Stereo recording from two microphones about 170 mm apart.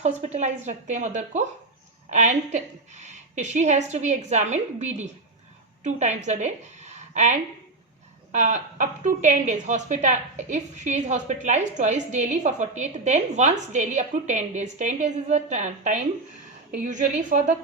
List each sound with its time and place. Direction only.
0.0 s a woman's voice: 40° right (ahead or behind)